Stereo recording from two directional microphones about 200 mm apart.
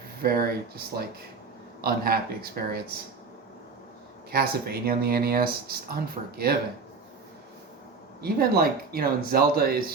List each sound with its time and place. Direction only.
0.2 s speech: 50° right (ahead or behind)
1.8 s speech: 50° right (ahead or behind)
4.3 s speech: 50° right (ahead or behind)
8.2 s speech: 50° right (ahead or behind)